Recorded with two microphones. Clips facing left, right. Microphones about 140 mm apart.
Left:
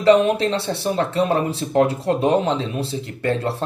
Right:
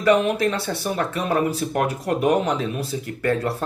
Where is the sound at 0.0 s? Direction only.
30° left (ahead or behind).